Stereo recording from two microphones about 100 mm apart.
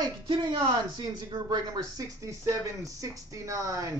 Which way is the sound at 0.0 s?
45° right (ahead or behind).